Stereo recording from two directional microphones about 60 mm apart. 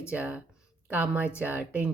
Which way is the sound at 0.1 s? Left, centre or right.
Right.